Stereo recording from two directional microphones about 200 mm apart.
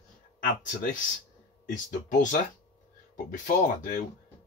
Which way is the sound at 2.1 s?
40° left (ahead or behind).